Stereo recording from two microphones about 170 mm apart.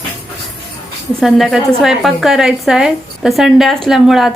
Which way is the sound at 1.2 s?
Centre (ahead or behind).